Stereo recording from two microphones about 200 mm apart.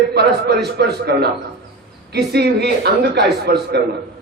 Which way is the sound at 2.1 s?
55° right (ahead or behind).